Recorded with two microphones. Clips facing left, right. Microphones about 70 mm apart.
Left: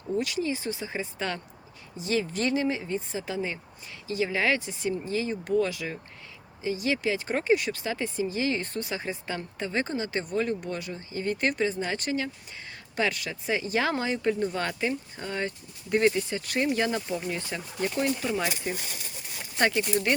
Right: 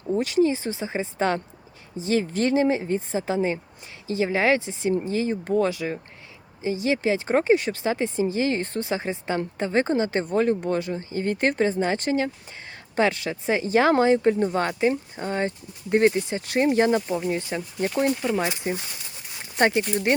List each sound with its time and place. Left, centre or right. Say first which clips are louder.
0.1 s speech: right 7 dB; right
17.2 s speech: right 6 dB; right